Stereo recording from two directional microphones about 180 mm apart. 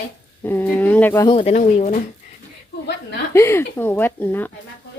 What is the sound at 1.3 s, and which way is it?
Speech, 35° left (ahead or behind).